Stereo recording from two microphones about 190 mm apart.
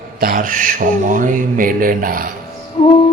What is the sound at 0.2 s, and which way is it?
Speech, 45° right (ahead or behind).